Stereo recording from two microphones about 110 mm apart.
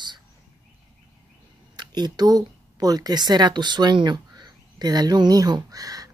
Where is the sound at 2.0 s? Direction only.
40° right (ahead or behind).